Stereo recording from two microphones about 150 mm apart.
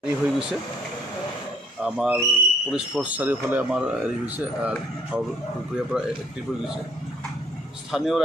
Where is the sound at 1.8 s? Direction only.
5° right (ahead or behind).